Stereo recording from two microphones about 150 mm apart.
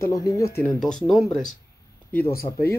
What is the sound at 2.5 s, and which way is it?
Speech, 40° left (ahead or behind).